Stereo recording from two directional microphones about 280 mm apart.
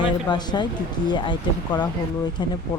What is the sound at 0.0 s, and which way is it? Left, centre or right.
Speech, centre.